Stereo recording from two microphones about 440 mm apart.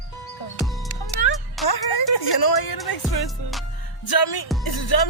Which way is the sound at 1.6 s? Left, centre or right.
Left.